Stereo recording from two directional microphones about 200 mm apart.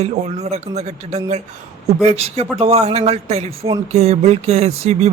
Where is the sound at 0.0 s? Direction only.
35° right (ahead or behind).